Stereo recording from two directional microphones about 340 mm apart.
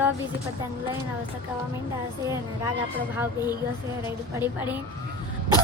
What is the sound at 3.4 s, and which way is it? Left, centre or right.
Speech, centre.